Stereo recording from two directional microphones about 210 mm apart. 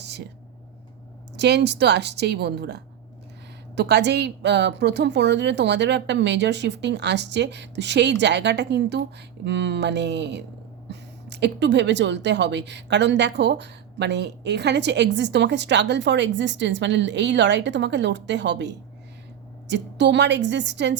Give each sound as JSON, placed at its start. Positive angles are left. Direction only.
{"t": 1.4, "sound": "a woman's voice", "side_deg": -55}